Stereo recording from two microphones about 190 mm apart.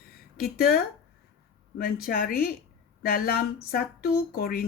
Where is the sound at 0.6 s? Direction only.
50° left (ahead or behind).